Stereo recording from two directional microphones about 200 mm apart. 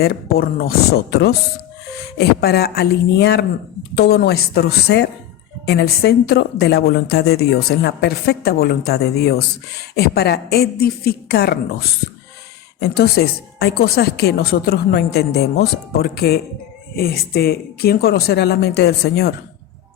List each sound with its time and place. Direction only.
0.0 s speech: 50° left (ahead or behind)
12.8 s speech: 55° left (ahead or behind)